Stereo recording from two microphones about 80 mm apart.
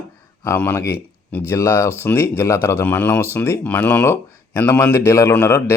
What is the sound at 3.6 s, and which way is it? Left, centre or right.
Speech, left.